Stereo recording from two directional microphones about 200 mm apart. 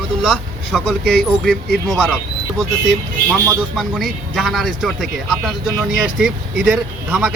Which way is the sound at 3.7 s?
Centre (ahead or behind).